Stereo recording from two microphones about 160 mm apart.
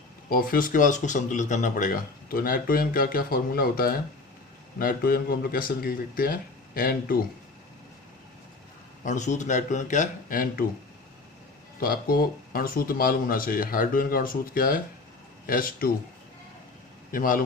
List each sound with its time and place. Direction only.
0.3 s speech: 65° left (ahead or behind)
9.0 s a man's voice: 50° left (ahead or behind)
11.8 s speech: 65° left (ahead or behind)
17.1 s speech: 60° left (ahead or behind)